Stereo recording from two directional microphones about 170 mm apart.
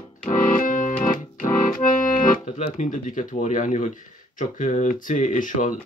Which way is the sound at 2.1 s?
50° left (ahead or behind).